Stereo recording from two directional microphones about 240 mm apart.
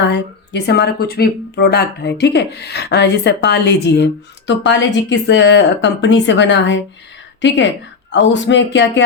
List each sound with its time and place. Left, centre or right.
0.0 s speech: left